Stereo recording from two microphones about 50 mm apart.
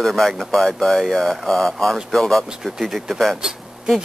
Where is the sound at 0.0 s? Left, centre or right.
Centre.